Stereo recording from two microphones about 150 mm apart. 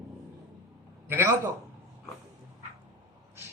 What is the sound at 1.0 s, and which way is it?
Speech, 15° right (ahead or behind).